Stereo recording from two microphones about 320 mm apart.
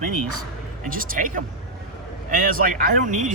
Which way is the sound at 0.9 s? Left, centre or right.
Right.